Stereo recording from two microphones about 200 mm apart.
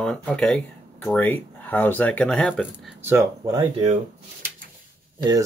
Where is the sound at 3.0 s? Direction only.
10° right (ahead or behind).